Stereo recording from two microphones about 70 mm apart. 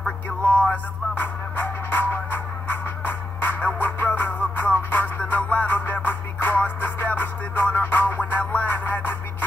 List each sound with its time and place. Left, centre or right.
0.7 s music: left